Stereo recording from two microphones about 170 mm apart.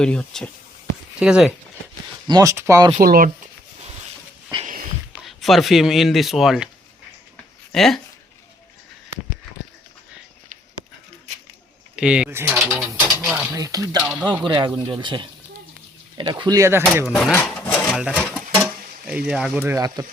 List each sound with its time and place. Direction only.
0.0 s speech: 5° left (ahead or behind)
2.2 s speech: 20° right (ahead or behind)
3.0 s speech: 60° right (ahead or behind)
4.5 s sniff: 25° right (ahead or behind)
5.1 s speech: centre (ahead or behind)
7.7 s speech: centre (ahead or behind)
11.9 s speech: 5° right (ahead or behind)
12.5 s mechanisms: centre (ahead or behind)
13.6 s speech: 20° right (ahead or behind)
17.3 s sewing machine: 5° left (ahead or behind)
17.9 s speech: 5° right (ahead or behind)